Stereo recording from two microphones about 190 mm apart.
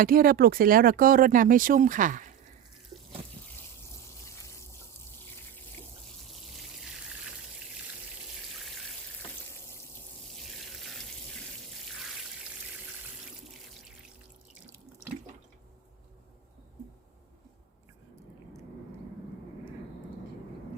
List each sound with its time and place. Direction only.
0.0 s speech: 50° right (ahead or behind)